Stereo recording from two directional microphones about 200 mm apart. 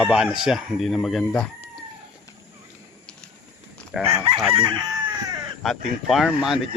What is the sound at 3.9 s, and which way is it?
Speech, 5° right (ahead or behind).